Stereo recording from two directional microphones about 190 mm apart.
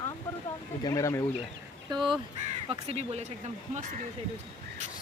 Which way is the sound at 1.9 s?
25° right (ahead or behind).